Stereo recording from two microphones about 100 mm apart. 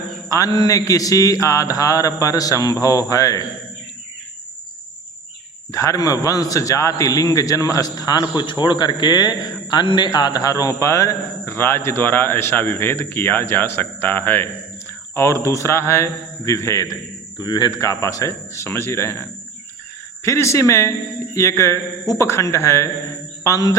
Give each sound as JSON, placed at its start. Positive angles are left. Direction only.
{"t": 0.3, "sound": "a man's voice", "side_deg": 35}
{"t": 5.7, "sound": "a man's voice", "side_deg": 35}